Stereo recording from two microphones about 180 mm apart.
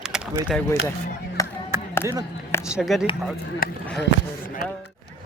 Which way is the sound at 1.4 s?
20° left (ahead or behind).